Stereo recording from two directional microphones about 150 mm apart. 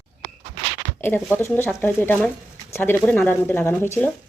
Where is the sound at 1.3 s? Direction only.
15° left (ahead or behind).